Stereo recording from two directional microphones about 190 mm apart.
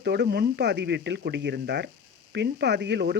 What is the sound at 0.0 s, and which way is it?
Speech, 60° right (ahead or behind).